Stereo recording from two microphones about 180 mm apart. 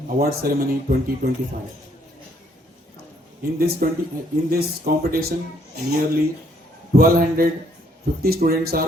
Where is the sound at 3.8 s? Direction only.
55° right (ahead or behind).